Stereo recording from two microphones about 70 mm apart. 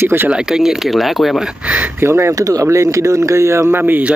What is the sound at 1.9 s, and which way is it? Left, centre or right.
Speech, right.